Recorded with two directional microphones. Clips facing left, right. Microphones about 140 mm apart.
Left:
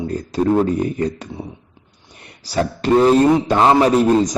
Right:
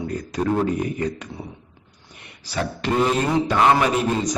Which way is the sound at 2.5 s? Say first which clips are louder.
Left 7 dB; 35° left (ahead or behind).